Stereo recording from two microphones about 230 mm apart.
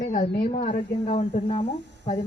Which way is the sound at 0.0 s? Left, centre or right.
Left.